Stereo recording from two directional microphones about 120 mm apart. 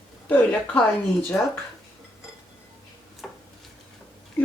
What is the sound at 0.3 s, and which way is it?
Speech, 10° left (ahead or behind).